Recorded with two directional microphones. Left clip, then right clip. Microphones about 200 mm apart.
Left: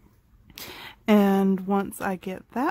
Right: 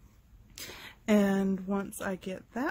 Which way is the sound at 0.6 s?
25° left (ahead or behind).